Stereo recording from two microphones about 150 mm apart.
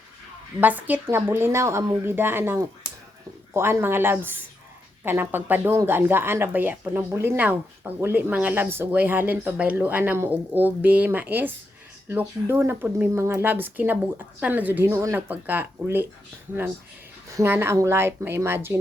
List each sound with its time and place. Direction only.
0.6 s speech: 10° right (ahead or behind)
17.3 s speech: 15° right (ahead or behind)